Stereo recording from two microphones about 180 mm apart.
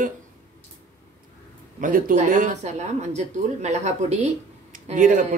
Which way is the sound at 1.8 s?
50° right (ahead or behind).